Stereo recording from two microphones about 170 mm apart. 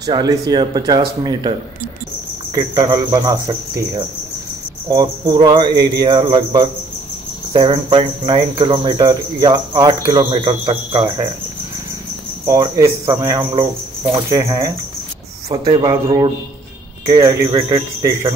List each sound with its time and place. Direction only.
0.0 s speech: 25° right (ahead or behind)
2.5 s speech: 25° right (ahead or behind)
12.4 s speech: 20° right (ahead or behind)